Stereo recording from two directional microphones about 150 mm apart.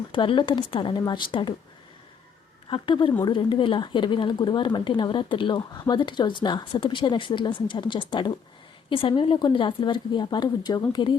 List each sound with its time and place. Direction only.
0.1 s a woman's voice: 30° left (ahead or behind)
2.6 s a woman's voice: 35° left (ahead or behind)